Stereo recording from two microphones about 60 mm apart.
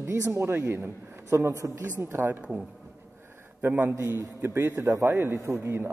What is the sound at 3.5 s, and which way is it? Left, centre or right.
A man's voice, right.